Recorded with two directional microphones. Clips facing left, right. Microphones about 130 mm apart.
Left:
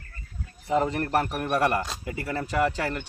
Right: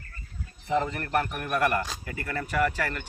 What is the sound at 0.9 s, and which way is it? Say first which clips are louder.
Speech: left 3 dB; 35° left (ahead or behind).